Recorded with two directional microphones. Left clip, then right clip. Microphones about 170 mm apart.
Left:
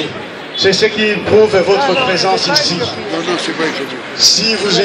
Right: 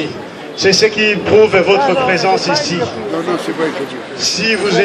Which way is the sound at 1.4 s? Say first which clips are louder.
Right 1 dB; 5° right (ahead or behind).